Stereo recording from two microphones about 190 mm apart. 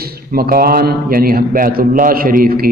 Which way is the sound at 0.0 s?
50° right (ahead or behind).